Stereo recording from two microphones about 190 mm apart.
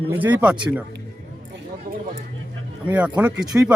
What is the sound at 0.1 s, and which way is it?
Speech, 10° right (ahead or behind).